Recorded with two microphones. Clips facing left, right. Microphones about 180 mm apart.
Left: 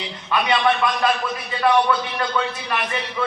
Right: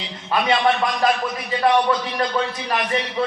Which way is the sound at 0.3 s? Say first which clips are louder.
Right 1 dB; 40° right (ahead or behind).